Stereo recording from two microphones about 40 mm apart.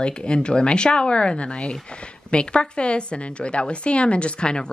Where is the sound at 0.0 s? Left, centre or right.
Left.